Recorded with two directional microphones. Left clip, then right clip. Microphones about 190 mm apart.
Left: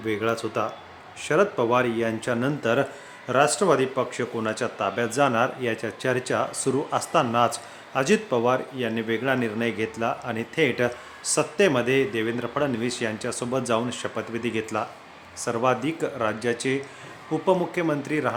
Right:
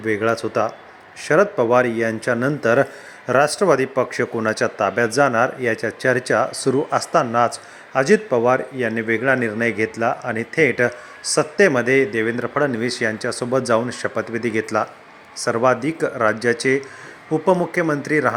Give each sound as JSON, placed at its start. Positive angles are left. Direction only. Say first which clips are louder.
{"t": 0.0, "sound": "a man's voice", "louder": "right 6 dB", "side_deg": -20}